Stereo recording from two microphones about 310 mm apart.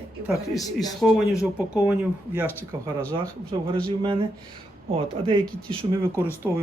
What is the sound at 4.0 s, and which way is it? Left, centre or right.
Speech, centre.